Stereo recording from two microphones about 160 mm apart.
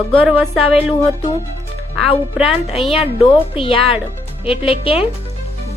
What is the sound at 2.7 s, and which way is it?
Music, 35° left (ahead or behind).